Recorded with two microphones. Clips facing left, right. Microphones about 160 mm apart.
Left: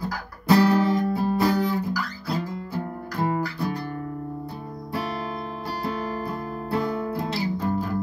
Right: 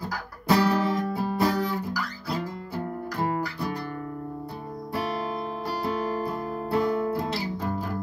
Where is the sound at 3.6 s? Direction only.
35° left (ahead or behind).